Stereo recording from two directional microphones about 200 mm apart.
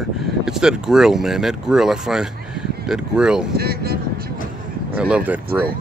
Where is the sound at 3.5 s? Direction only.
50° right (ahead or behind).